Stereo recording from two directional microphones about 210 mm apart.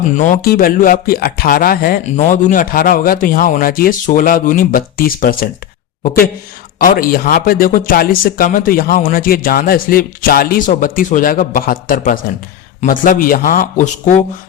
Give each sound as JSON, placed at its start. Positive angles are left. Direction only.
{"t": 0.2, "sound": "speech", "side_deg": 40}
{"t": 6.7, "sound": "speech", "side_deg": 45}